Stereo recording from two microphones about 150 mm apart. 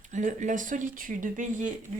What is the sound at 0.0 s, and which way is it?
A woman's voice, 55° right (ahead or behind).